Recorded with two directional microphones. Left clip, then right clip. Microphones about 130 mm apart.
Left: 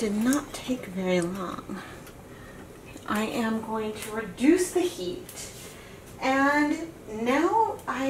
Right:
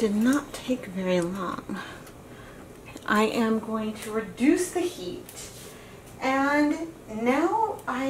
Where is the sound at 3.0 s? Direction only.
50° right (ahead or behind).